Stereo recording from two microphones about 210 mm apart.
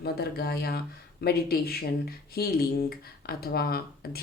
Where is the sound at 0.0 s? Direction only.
50° left (ahead or behind).